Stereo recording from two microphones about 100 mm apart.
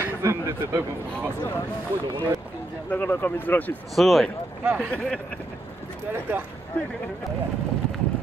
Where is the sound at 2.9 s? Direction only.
20° left (ahead or behind).